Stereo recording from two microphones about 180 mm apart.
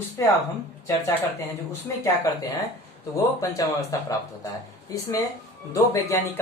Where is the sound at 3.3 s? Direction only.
20° left (ahead or behind).